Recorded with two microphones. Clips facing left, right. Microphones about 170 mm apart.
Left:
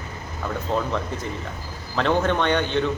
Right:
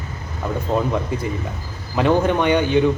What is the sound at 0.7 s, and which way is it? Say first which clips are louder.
Speech: right 4 dB; 10° right (ahead or behind).